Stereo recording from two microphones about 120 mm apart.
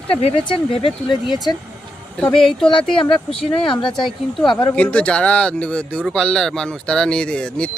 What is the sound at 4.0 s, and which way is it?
Speech, centre (ahead or behind).